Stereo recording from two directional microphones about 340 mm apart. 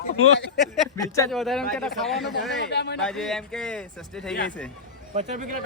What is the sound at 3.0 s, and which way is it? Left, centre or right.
Speech, centre.